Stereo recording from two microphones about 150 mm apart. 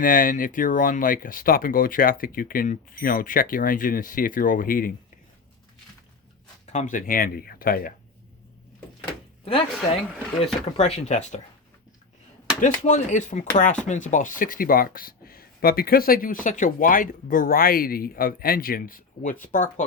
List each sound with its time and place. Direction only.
0.0 s speech: 65° left (ahead or behind)
6.7 s speech: 55° left (ahead or behind); by 7.9 s 75° left (ahead or behind)
9.4 s speech: 40° left (ahead or behind)
12.6 s speech: 55° left (ahead or behind)